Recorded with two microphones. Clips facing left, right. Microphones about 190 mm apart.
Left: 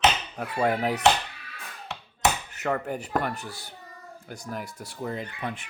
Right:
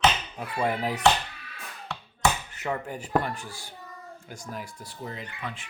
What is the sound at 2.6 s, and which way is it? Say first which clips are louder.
Speech: left 3 dB; 60° left (ahead or behind).